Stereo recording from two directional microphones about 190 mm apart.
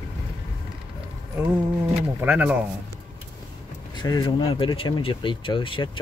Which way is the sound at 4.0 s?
20° left (ahead or behind).